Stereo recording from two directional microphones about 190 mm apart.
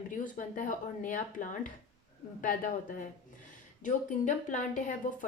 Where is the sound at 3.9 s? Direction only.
40° left (ahead or behind).